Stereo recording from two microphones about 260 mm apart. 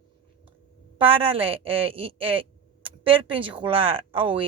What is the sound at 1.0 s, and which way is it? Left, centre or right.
Speech, right.